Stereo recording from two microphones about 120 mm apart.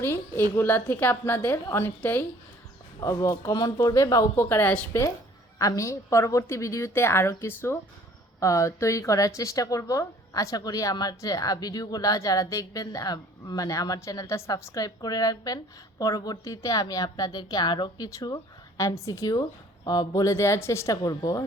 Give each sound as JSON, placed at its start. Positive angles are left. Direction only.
{"t": 0.0, "sound": "a woman's voice", "side_deg": 15}
{"t": 3.0, "sound": "speech", "side_deg": 25}
{"t": 5.5, "sound": "speech", "side_deg": 30}